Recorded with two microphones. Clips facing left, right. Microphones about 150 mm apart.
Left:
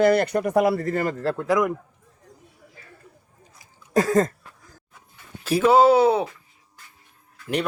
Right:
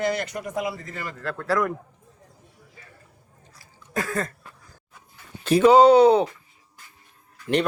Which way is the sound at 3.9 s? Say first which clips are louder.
Left 9 dB; 40° left (ahead or behind).